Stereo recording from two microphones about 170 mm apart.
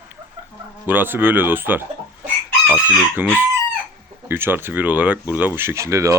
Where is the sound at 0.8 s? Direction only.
10° right (ahead or behind).